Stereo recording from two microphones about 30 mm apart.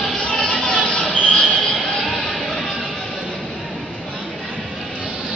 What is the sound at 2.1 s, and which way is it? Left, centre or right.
Music, centre.